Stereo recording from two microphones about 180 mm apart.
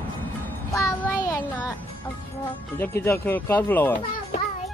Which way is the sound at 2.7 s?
10° left (ahead or behind).